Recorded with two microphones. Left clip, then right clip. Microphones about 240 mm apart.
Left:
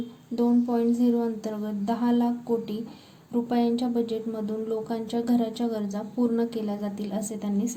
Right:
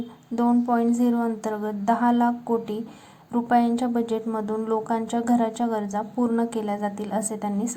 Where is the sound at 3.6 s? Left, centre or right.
Centre.